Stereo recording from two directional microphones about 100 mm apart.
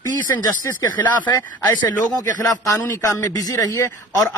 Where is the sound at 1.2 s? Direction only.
45° left (ahead or behind).